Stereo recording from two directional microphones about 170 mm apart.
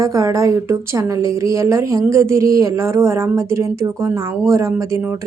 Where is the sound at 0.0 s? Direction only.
20° right (ahead or behind).